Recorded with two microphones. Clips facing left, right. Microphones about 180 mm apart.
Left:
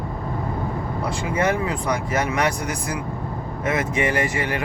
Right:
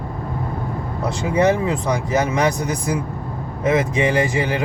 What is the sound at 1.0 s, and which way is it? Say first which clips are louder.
Speech: right 6 dB; 20° right (ahead or behind).